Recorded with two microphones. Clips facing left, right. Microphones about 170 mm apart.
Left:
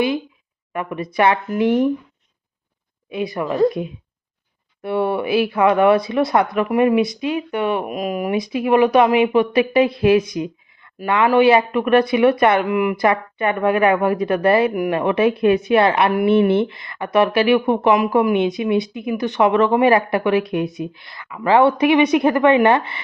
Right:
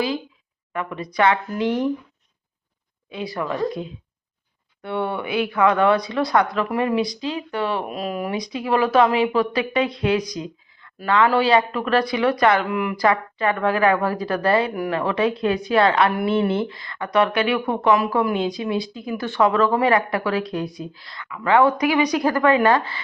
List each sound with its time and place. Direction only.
0.7 s speech: 25° left (ahead or behind)
3.1 s speech: 20° left (ahead or behind)
4.8 s speech: 25° left (ahead or behind)
12.6 s speech: 15° left (ahead or behind)